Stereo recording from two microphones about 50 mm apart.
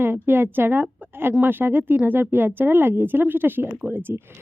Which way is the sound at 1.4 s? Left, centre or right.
Right.